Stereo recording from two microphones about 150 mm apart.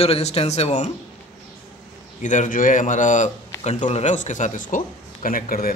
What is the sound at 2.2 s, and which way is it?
Speech, 55° left (ahead or behind).